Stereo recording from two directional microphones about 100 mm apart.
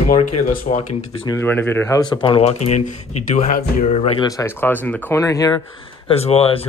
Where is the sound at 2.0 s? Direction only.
55° left (ahead or behind); by 2.5 s 70° left (ahead or behind).